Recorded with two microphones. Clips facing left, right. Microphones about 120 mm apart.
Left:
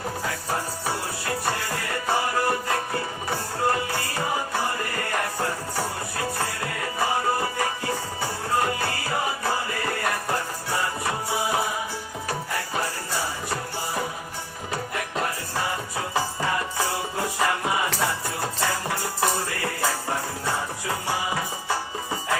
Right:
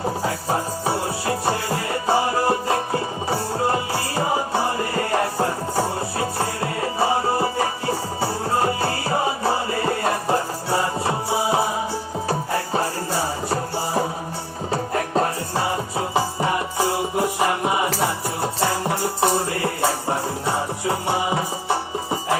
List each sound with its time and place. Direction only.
0.0 s music: 30° right (ahead or behind)